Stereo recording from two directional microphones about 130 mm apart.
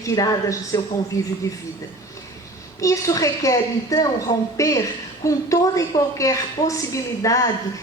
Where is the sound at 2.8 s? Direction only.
25° left (ahead or behind).